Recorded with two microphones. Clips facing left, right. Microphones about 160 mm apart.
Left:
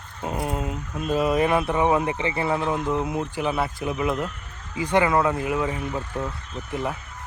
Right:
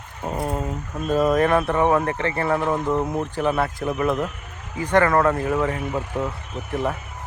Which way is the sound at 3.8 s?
50° right (ahead or behind).